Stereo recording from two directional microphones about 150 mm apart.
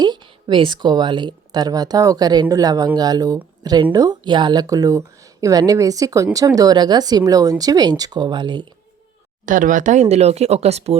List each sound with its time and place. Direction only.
0.0 s speech: 30° right (ahead or behind)
9.5 s speech: 60° right (ahead or behind); by 10.9 s 45° right (ahead or behind)